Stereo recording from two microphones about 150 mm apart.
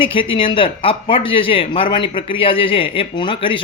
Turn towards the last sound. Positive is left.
turn(degrees=35)  # may be behind; listen again after turning